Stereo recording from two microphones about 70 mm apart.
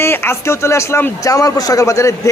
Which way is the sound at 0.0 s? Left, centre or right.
Left.